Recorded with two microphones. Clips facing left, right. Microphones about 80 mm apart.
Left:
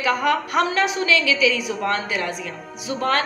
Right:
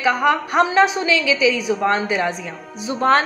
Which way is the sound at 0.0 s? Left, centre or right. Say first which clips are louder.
Right 3 dB; right.